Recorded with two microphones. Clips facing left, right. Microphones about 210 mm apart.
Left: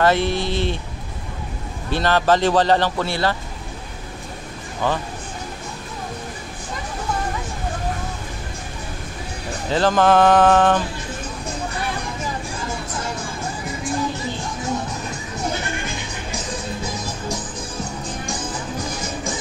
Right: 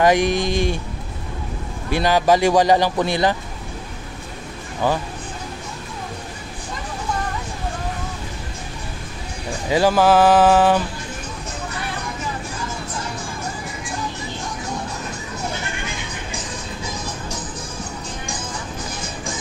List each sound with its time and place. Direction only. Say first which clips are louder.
0.0 s speech: right 2 dB; 15° right (ahead or behind)
1.9 s speech: right 1 dB; 10° right (ahead or behind)
4.8 s speech: right 2 dB; 10° right (ahead or behind)
9.7 s speech: right 1 dB; 10° right (ahead or behind)